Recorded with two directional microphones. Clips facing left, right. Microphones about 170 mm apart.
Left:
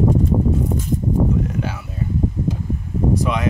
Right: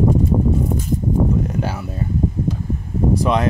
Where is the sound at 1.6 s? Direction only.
35° right (ahead or behind).